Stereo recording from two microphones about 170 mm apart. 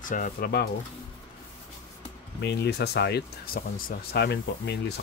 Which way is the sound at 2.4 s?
80° left.